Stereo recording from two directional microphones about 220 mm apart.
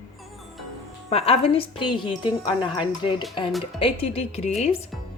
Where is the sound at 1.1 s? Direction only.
25° left (ahead or behind).